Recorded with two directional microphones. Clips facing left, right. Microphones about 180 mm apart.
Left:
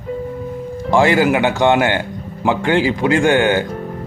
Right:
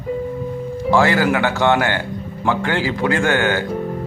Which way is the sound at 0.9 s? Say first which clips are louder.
Left 2 dB; 20° left (ahead or behind).